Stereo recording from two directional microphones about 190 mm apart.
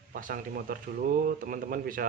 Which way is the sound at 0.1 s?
45° right (ahead or behind).